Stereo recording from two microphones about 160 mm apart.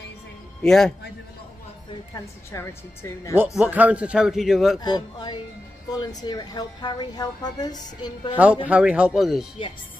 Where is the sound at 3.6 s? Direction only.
10° right (ahead or behind).